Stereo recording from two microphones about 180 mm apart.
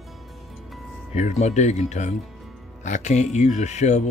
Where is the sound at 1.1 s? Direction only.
40° left (ahead or behind).